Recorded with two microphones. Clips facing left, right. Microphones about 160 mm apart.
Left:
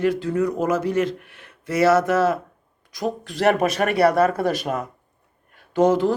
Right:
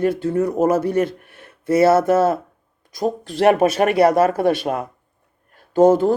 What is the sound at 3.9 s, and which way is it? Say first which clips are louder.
Speech: even; 45° right (ahead or behind).